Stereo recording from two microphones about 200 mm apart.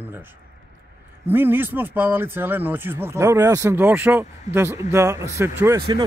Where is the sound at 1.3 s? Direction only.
10° right (ahead or behind).